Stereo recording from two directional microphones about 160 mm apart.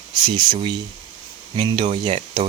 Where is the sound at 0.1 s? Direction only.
25° right (ahead or behind).